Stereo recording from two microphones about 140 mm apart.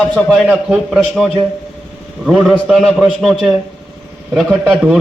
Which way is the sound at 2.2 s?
Centre (ahead or behind).